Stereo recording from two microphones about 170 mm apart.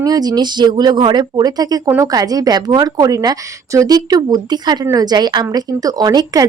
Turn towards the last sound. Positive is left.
turn(degrees=-20)  # may be behind; listen again after turning